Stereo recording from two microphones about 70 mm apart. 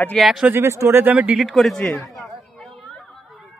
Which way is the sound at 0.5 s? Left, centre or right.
Right.